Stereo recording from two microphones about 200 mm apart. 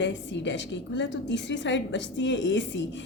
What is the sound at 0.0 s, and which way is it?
A woman's voice, 65° left (ahead or behind).